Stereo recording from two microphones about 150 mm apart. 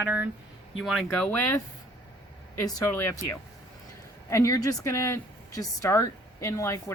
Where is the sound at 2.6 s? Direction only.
25° left (ahead or behind).